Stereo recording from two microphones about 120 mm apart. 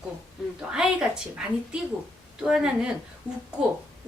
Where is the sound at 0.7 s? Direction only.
5° right (ahead or behind).